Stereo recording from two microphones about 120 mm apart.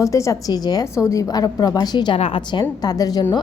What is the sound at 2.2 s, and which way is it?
A woman's voice, 50° left (ahead or behind).